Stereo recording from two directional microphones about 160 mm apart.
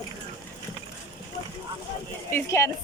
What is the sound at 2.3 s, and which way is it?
Speech, 20° left (ahead or behind).